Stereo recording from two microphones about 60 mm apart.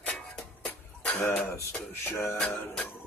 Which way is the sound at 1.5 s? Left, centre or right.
Left.